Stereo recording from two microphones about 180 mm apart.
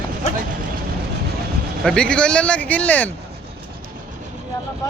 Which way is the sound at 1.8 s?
5° left (ahead or behind).